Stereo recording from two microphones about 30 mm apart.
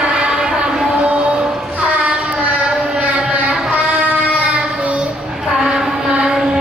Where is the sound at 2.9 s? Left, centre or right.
Right.